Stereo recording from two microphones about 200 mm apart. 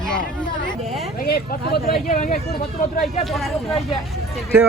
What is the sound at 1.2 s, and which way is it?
Speech, 50° left (ahead or behind).